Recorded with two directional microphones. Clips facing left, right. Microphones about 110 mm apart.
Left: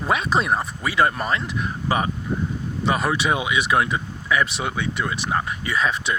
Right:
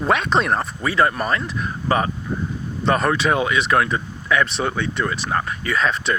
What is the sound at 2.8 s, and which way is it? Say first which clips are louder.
Speech: right 3 dB; 10° left (ahead or behind).